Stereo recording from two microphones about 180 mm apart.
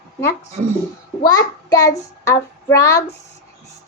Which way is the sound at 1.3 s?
20° left (ahead or behind).